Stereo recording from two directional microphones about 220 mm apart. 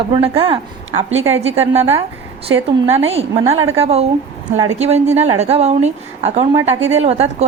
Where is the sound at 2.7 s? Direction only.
25° right (ahead or behind).